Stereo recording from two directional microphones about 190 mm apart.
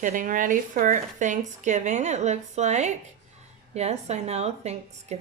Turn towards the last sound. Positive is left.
turn(degrees=-35)  # may be behind; listen again after turning